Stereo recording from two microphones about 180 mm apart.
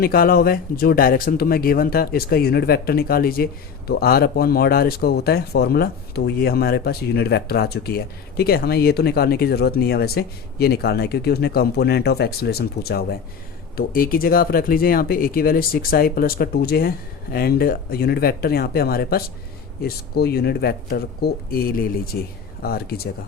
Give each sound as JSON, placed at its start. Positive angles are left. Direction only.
{"t": 0.0, "sound": "speech", "side_deg": 55}